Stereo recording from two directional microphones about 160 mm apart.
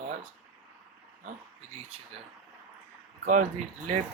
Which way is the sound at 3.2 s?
50° right (ahead or behind).